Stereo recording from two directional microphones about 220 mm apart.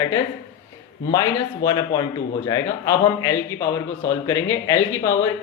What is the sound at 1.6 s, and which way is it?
Speech, 15° left (ahead or behind).